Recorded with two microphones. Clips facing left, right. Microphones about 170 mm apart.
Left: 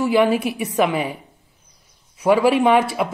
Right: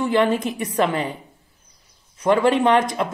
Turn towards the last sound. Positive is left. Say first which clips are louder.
# left 2 dB
turn(degrees=5)  # may be behind; listen again after turning